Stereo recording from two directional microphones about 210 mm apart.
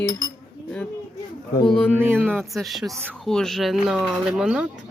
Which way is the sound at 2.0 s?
10° right (ahead or behind).